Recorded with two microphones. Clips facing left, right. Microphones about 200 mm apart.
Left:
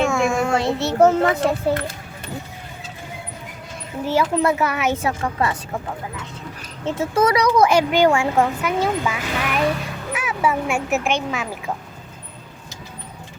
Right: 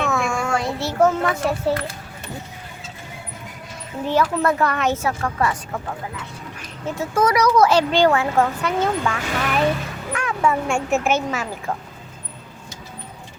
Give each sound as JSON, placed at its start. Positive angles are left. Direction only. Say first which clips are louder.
{"t": 0.1, "sound": "a child's voice", "louder": "left 3 dB", "side_deg": 15}
{"t": 4.0, "sound": "speech", "louder": "left 1 dB", "side_deg": 10}
{"t": 5.0, "sound": "speech", "louder": "even", "side_deg": 20}
{"t": 6.8, "sound": "speech", "louder": "left 2 dB", "side_deg": 25}